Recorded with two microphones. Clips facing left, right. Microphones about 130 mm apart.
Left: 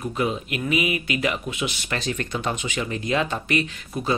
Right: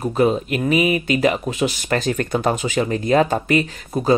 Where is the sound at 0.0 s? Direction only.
40° right (ahead or behind).